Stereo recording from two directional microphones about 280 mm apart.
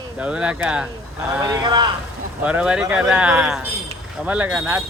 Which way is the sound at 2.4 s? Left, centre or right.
Centre.